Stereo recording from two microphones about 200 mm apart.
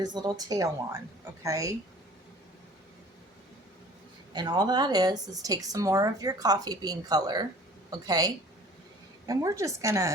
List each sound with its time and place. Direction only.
0.0 s a woman's voice: 20° right (ahead or behind)
4.3 s a woman's voice: 20° right (ahead or behind)